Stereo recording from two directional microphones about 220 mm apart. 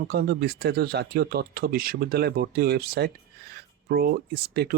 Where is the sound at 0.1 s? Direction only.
45° right (ahead or behind).